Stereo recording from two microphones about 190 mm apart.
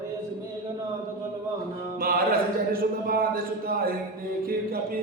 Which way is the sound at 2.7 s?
50° right (ahead or behind).